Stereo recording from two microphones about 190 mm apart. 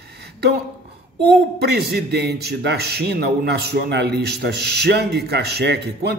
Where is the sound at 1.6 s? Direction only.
60° right (ahead or behind).